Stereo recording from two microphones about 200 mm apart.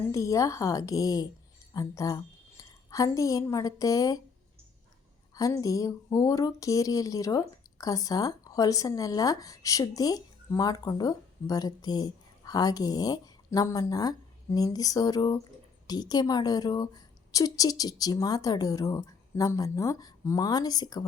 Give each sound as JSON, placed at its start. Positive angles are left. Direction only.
{"t": 0.1, "sound": "a woman's voice", "side_deg": 15}
{"t": 5.3, "sound": "a woman's voice", "side_deg": 15}